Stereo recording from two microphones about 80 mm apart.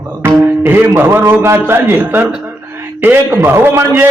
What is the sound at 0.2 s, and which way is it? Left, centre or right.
A man's voice, right.